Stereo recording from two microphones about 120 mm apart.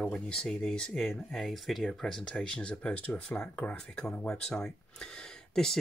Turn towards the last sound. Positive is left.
turn(degrees=5)  # may be behind; listen again after turning